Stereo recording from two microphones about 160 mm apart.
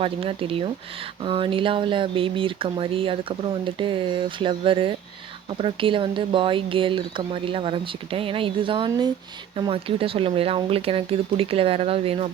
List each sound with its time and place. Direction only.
0.0 s speech: 35° right (ahead or behind)